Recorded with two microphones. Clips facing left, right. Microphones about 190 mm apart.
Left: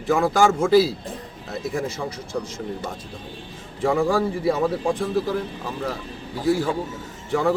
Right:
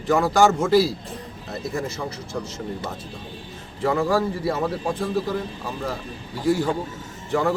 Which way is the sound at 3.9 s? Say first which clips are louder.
Left 1 dB; 10° left (ahead or behind).